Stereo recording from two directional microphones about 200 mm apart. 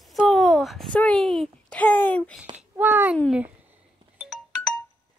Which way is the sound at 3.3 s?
10° right (ahead or behind).